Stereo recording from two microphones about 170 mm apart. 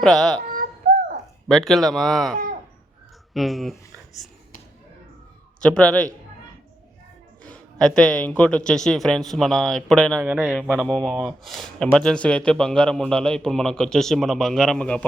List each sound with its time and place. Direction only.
0.0 s a man's voice: centre (ahead or behind)
0.5 s bird: 55° right (ahead or behind)
1.5 s a man's voice: centre (ahead or behind)
3.3 s speech: centre (ahead or behind)
5.5 s a man's voice: 5° left (ahead or behind)
7.4 s a man's voice: 5° left (ahead or behind)
10.2 s a man's voice: 10° right (ahead or behind)